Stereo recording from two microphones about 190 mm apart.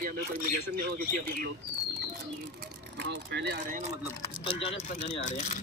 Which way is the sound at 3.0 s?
65° right (ahead or behind).